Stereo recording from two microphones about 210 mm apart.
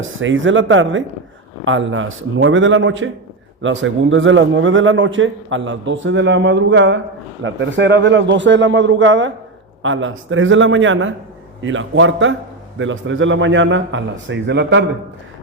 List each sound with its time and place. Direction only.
0.1 s a man's voice: 65° right (ahead or behind)